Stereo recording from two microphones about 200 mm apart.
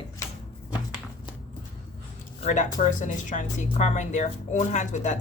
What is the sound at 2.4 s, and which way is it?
Speech, 40° left (ahead or behind).